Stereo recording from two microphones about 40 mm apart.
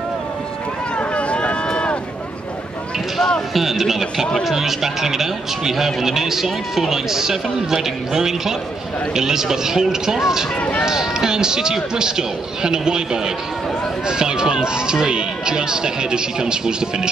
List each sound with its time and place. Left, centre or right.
0.9 s run: left
3.5 s speech: centre